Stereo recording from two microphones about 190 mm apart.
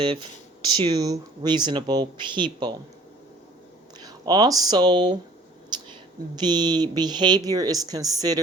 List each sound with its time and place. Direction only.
0.0 s speech: 25° right (ahead or behind)
4.0 s speech: 20° right (ahead or behind)
6.4 s speech: 20° right (ahead or behind)